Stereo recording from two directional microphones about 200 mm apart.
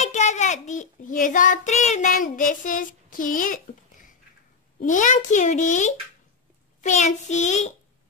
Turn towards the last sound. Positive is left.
turn(degrees=35)  # may be behind; listen again after turning